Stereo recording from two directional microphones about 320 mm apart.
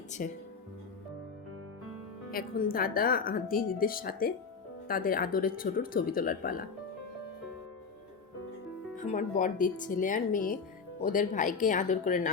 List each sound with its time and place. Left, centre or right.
0.2 s a woman's voice: left
2.3 s a woman's voice: left
9.0 s a woman's voice: left